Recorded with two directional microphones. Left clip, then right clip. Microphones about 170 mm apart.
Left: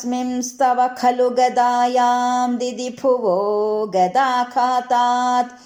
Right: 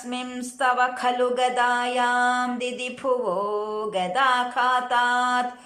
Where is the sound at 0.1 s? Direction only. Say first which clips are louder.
Left 8 dB; 35° left (ahead or behind).